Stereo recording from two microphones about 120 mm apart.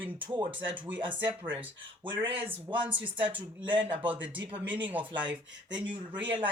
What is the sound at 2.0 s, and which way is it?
Speech, 45° right (ahead or behind).